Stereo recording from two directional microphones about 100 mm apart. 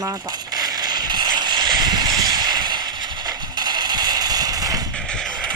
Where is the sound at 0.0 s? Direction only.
35° right (ahead or behind).